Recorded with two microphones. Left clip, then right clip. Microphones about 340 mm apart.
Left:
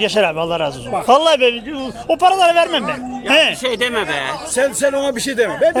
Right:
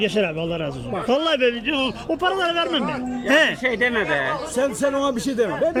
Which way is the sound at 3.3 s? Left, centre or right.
Centre.